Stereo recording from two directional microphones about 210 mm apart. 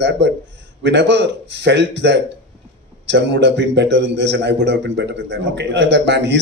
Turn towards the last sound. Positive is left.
turn(degrees=-55)  # may be behind; listen again after turning